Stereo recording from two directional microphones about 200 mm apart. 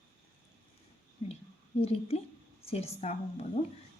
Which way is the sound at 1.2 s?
30° left (ahead or behind).